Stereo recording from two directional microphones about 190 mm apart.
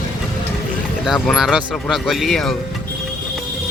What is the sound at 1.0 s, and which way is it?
Speech, centre (ahead or behind).